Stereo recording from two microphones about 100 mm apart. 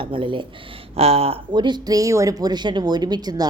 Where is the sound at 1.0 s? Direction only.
80° right.